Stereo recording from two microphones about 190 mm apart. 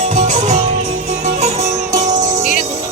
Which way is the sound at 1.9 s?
20° right (ahead or behind).